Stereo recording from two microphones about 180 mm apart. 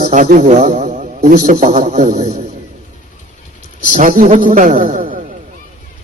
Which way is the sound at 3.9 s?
50° right (ahead or behind).